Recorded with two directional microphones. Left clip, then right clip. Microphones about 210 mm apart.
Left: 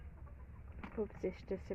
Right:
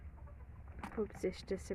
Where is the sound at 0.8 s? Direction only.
55° right (ahead or behind).